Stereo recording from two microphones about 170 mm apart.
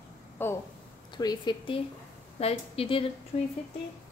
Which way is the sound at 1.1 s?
25° left (ahead or behind).